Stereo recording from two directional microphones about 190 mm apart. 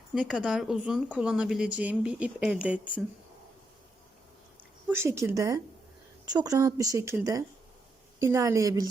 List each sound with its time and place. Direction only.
0.1 s speech: 5° right (ahead or behind)
4.9 s a woman's voice: 15° right (ahead or behind)